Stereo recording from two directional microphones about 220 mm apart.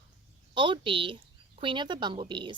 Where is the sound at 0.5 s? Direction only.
20° right (ahead or behind).